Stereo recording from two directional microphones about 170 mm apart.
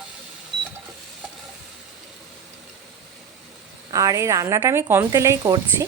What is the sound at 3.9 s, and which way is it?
Speech, 20° right (ahead or behind).